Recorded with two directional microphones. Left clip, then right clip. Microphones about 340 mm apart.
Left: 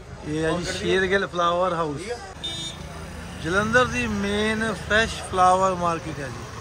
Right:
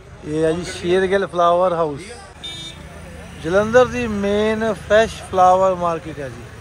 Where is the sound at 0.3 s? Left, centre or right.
Centre.